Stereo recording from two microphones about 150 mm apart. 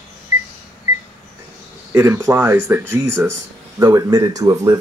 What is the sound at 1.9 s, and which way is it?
Speech, 15° right (ahead or behind).